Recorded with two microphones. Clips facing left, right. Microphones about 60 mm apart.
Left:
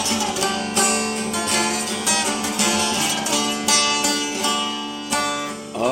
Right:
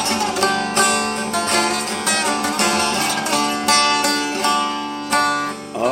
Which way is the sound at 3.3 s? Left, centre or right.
Right.